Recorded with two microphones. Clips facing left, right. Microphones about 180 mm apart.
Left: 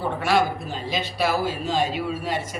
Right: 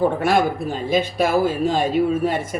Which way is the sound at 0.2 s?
50° right (ahead or behind).